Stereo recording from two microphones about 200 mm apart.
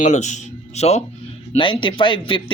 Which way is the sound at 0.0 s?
35° left (ahead or behind).